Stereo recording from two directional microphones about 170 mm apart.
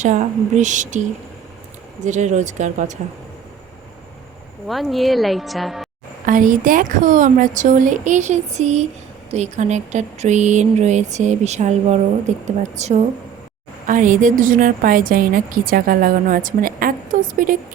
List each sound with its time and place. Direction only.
0.0 s a woman's voice: 45° right (ahead or behind)
2.0 s a woman's voice: 45° right (ahead or behind)
4.7 s a woman's voice: centre (ahead or behind)
6.2 s a woman's voice: 50° right (ahead or behind)